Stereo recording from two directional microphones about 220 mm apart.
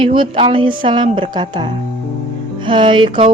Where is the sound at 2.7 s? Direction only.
20° right (ahead or behind).